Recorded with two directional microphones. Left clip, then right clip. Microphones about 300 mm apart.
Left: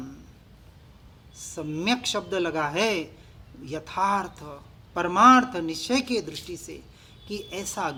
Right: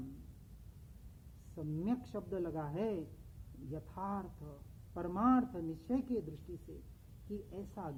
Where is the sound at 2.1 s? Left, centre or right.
Centre.